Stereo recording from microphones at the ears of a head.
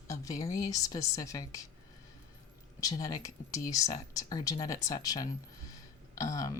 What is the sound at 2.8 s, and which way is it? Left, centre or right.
A woman's voice, left.